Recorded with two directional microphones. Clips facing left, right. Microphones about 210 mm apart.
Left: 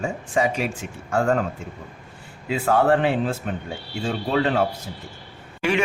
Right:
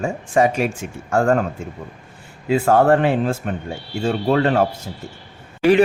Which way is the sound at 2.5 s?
45° right (ahead or behind).